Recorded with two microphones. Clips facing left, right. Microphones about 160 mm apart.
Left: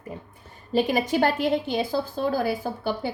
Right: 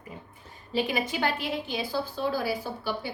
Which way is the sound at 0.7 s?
45° left (ahead or behind).